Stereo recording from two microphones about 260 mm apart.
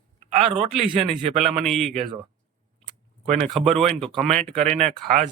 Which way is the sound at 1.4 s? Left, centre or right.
Centre.